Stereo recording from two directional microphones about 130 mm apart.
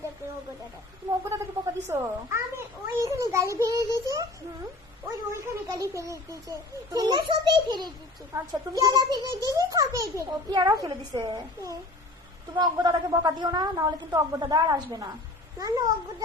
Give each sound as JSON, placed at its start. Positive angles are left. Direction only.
{"t": 1.2, "sound": "a sound", "side_deg": -20}
{"t": 4.1, "sound": "a woman's voice", "side_deg": -25}
{"t": 8.3, "sound": "a child's voice", "side_deg": -20}
{"t": 8.8, "sound": "a child's voice", "side_deg": -30}